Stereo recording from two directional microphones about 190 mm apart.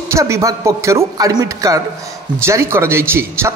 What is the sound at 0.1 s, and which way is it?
A man's voice, 15° right (ahead or behind).